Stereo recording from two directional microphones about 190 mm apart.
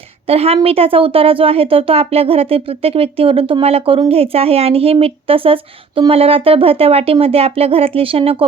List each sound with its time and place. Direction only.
0.3 s speech: 30° right (ahead or behind)